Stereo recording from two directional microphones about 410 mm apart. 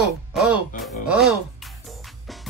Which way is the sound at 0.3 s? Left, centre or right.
Centre.